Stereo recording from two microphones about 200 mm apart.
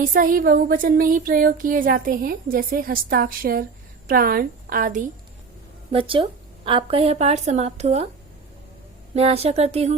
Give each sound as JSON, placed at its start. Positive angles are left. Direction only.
{"t": 0.0, "sound": "speech", "side_deg": -45}
{"t": 5.9, "sound": "a woman's voice", "side_deg": -25}
{"t": 9.1, "sound": "a woman's voice", "side_deg": -30}